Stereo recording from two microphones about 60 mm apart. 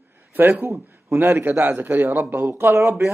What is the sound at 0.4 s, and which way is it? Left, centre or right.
A man's voice, right.